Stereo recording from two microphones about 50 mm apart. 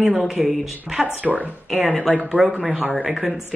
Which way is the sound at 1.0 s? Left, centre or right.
Right.